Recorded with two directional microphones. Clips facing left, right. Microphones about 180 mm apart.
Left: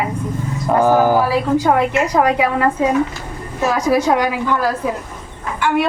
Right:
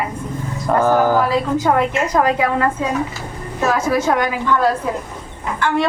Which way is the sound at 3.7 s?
15° left (ahead or behind).